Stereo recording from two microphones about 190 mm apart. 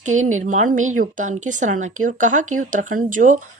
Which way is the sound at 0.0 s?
40° right (ahead or behind).